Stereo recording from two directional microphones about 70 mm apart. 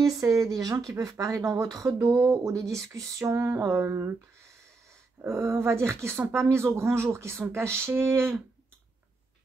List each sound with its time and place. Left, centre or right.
0.0 s speech: right
3.4 s speech: right
5.2 s speech: right